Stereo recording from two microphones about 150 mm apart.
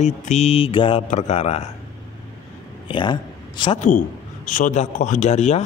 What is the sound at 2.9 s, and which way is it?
Speech, 30° left (ahead or behind).